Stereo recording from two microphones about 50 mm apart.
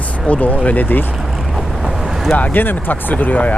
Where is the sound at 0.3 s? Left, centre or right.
Left.